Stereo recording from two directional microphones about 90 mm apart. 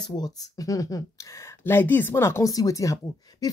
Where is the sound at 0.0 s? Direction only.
50° left (ahead or behind).